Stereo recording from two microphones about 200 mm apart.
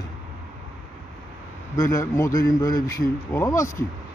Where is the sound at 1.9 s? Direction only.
15° left (ahead or behind).